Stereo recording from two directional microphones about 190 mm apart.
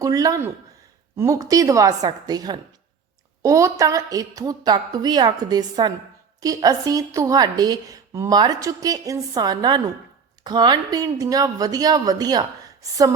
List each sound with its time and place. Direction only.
0.0 s a woman's voice: 20° right (ahead or behind)